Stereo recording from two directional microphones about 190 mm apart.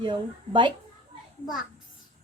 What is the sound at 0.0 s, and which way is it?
Speech, 25° right (ahead or behind).